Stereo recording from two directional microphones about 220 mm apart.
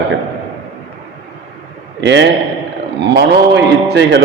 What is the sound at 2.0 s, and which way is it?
A man's voice, 55° right (ahead or behind).